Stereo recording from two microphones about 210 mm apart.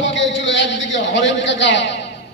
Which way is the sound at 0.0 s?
60° left (ahead or behind).